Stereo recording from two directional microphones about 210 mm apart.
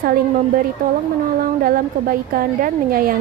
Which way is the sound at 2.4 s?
40° right (ahead or behind).